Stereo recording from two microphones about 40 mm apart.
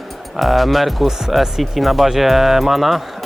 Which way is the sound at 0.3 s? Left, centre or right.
Centre.